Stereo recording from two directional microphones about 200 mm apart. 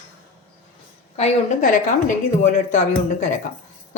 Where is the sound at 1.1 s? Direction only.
35° left (ahead or behind).